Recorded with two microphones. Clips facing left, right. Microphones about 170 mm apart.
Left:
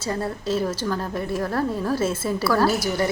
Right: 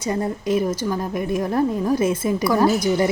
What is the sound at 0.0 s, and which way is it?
A woman's voice, 15° right (ahead or behind).